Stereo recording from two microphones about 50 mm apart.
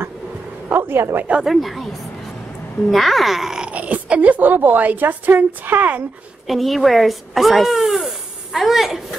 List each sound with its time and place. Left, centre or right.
0.7 s speech: right
1.4 s speech: centre
3.7 s a woman's voice: right
6.4 s speech: centre